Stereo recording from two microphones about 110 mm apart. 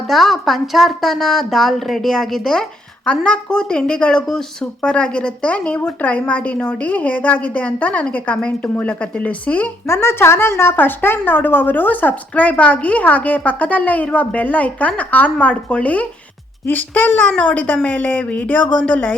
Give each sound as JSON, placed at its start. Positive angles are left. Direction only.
{"t": 0.1, "sound": "a woman's voice", "side_deg": 0}